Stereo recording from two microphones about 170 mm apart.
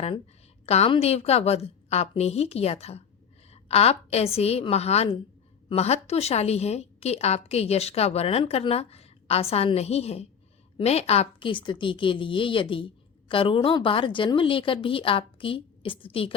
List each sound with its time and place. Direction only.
0.6 s a woman's voice: 35° left (ahead or behind)